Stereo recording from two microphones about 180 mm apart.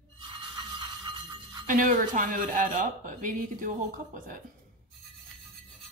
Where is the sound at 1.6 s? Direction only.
45° right (ahead or behind).